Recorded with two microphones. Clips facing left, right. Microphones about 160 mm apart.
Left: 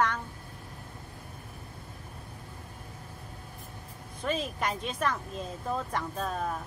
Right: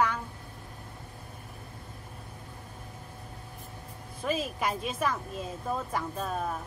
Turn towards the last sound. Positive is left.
turn(degrees=-5)  # may be behind; listen again after turning